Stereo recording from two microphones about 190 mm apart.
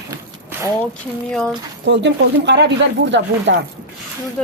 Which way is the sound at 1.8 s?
65° right (ahead or behind).